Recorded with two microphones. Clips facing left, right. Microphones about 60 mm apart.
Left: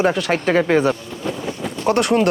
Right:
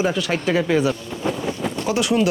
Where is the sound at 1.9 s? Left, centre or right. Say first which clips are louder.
Left 4 dB; left.